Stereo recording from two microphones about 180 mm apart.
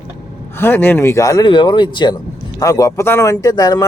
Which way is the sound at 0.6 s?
10° left (ahead or behind).